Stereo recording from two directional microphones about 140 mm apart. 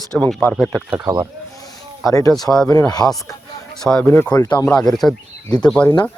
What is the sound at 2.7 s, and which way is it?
Speech, 30° left (ahead or behind).